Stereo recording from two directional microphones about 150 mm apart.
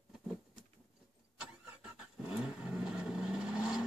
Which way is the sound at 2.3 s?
5° right (ahead or behind).